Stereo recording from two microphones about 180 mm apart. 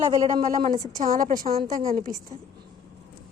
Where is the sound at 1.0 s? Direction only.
45° right (ahead or behind).